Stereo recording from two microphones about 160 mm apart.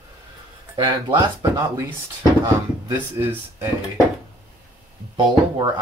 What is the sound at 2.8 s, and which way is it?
Speech, 15° right (ahead or behind).